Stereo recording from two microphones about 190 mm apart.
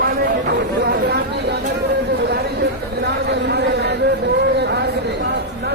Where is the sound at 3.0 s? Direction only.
60° right (ahead or behind).